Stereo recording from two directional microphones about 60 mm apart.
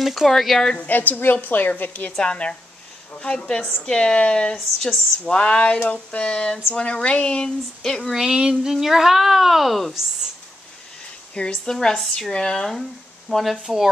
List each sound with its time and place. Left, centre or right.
0.0 s speech: centre
0.7 s a woman's voice: left
2.1 s a sound: centre
8.2 s speech: centre
11.3 s a sound: centre
13.3 s speech: centre